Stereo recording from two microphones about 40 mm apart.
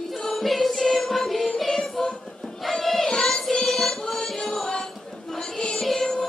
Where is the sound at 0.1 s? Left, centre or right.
Centre.